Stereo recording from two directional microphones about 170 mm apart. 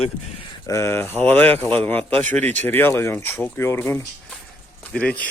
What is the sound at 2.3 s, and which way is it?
Speech, 10° left (ahead or behind).